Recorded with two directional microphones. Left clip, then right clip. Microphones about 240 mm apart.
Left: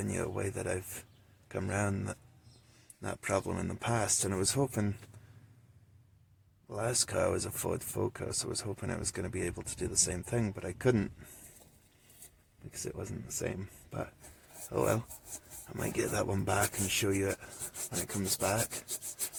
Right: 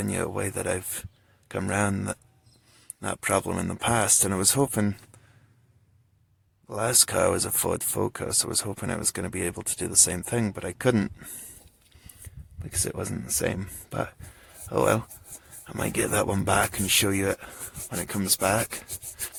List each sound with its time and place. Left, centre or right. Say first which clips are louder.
0.0 s speech: right 7 dB; right
6.7 s speech: right 9 dB; right
12.8 s speech: right 9 dB; right